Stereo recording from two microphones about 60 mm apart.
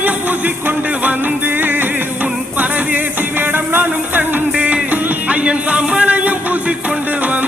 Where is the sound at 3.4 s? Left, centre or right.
Right.